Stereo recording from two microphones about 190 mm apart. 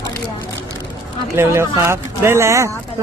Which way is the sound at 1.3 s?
15° right (ahead or behind).